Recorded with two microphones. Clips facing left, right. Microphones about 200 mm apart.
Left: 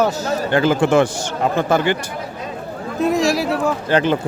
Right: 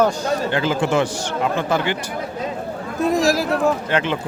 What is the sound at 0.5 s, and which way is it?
Speech, 50° left (ahead or behind).